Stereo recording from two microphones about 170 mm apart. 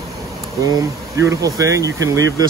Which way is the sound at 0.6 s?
20° right (ahead or behind).